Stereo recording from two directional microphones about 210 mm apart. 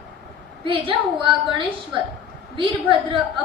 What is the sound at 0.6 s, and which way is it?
A woman's voice, 25° right (ahead or behind).